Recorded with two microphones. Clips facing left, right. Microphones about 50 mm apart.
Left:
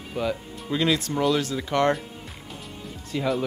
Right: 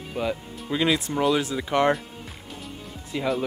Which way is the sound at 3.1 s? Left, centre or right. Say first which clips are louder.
Even; centre.